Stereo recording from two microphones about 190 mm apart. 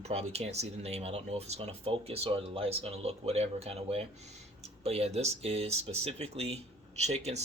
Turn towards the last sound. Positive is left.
turn(degrees=-35)  # may be behind; listen again after turning